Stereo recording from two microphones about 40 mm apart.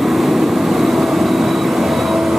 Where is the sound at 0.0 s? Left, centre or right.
Centre.